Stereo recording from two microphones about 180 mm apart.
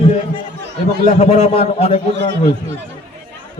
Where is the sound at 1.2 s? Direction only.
35° left (ahead or behind).